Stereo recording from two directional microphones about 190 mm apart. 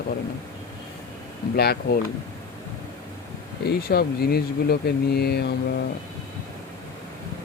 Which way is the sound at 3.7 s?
55° left (ahead or behind).